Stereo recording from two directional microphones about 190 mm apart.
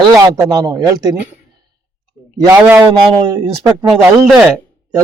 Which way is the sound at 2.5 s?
10° right (ahead or behind).